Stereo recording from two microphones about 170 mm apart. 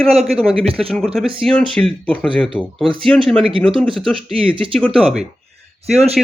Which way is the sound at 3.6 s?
30° right (ahead or behind).